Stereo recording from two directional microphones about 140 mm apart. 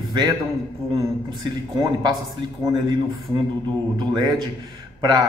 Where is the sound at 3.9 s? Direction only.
30° right (ahead or behind).